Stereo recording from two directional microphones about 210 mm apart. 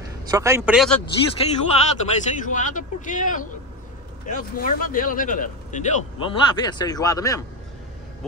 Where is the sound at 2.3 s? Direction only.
35° left (ahead or behind).